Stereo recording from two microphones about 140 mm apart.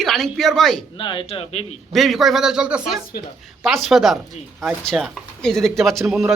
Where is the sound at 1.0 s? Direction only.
35° left (ahead or behind).